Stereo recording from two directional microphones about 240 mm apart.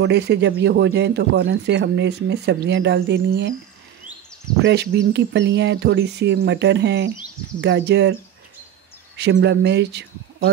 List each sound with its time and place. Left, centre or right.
0.0 s speech: right
4.6 s speech: right